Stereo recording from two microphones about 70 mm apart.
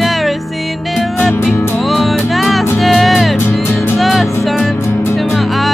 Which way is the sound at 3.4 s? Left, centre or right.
Left.